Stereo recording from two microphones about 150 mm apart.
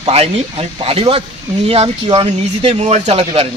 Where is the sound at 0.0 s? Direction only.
45° right (ahead or behind).